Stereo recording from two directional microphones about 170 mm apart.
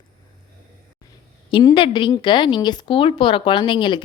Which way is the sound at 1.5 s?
30° left (ahead or behind).